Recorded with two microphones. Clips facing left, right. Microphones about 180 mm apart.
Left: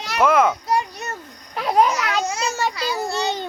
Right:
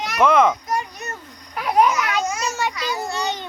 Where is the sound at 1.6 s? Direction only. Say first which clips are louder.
Even; 30° left (ahead or behind).